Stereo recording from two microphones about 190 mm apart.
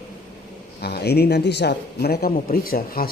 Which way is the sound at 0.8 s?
60° left (ahead or behind).